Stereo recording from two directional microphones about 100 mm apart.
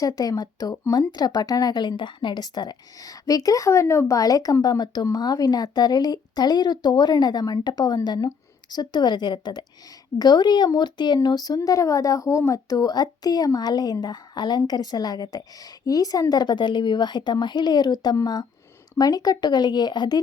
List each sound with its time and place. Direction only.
0.0 s speech: 40° left (ahead or behind)